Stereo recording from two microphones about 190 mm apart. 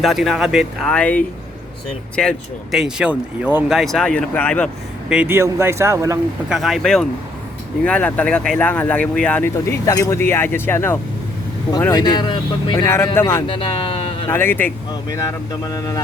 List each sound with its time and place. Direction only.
0.0 s speech: centre (ahead or behind)
2.7 s speech: 5° right (ahead or behind)
5.0 s speech: 10° right (ahead or behind)
6.5 s speech: centre (ahead or behind)
15.7 s speech: 20° left (ahead or behind)